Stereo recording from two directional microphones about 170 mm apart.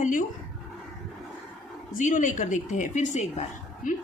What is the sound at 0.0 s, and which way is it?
Dog, 50° left (ahead or behind).